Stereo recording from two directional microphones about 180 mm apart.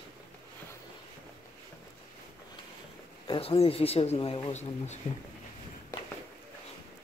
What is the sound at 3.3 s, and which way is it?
Speech, 30° left (ahead or behind).